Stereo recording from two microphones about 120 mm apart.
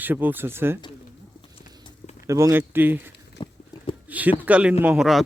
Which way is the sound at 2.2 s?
25° right (ahead or behind).